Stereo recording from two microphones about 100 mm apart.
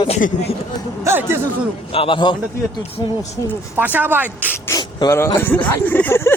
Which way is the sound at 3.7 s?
15° right (ahead or behind).